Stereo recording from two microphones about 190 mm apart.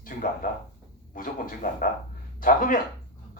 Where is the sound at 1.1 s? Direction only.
45° left (ahead or behind).